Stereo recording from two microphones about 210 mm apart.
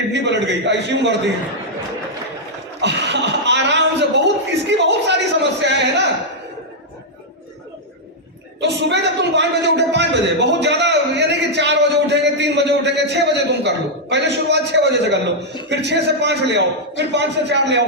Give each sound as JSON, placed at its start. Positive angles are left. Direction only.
{"t": 0.1, "sound": "a man's voice", "side_deg": -55}
{"t": 2.8, "sound": "a sound", "side_deg": -55}
{"t": 8.6, "sound": "a man's voice", "side_deg": -55}